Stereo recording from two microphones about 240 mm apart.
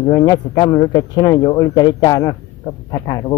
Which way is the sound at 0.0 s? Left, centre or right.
Centre.